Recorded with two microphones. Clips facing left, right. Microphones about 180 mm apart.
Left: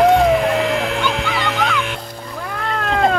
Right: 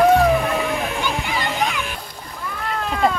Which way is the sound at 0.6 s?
80° left.